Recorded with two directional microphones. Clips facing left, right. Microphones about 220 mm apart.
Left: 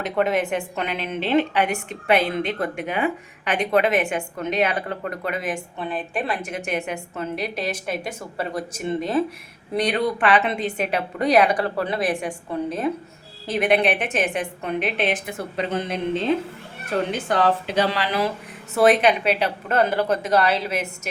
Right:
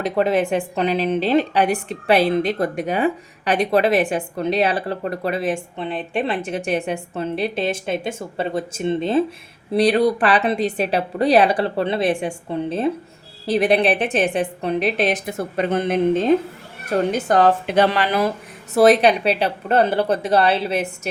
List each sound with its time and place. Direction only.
0.0 s a woman's voice: 35° right (ahead or behind); by 18.3 s 50° right (ahead or behind)
18.7 s a woman's voice: 35° right (ahead or behind)